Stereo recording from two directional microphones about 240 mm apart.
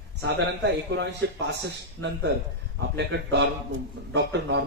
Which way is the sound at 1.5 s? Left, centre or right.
Right.